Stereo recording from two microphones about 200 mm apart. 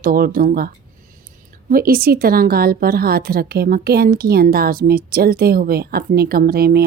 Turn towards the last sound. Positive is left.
turn(degrees=-50)  # may be behind; listen again after turning